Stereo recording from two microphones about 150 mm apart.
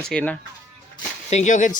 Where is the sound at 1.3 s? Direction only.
50° left (ahead or behind).